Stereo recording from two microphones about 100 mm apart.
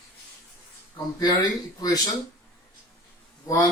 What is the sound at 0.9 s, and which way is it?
Speech, 40° left (ahead or behind).